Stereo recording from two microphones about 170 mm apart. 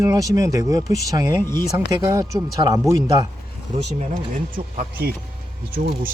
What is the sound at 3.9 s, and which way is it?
Speech, 50° right (ahead or behind).